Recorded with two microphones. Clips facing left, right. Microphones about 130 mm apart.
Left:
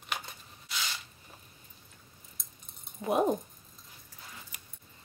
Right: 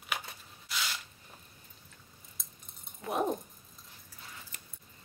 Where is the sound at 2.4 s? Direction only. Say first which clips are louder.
Right 1 dB; centre (ahead or behind).